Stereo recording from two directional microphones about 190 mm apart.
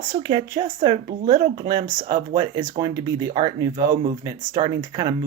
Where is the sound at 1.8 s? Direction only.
45° right (ahead or behind).